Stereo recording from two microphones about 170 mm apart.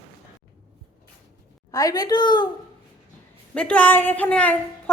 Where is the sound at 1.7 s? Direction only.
20° left (ahead or behind).